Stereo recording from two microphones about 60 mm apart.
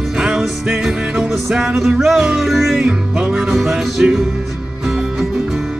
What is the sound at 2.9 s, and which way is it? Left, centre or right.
Music, centre.